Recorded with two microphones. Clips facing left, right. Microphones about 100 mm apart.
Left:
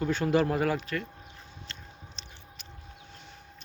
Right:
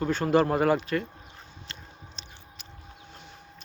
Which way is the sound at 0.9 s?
Centre (ahead or behind).